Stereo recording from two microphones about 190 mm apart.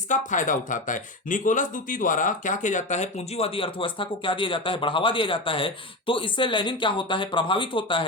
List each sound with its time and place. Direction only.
0.1 s speech: 40° left (ahead or behind); by 8.0 s 25° left (ahead or behind)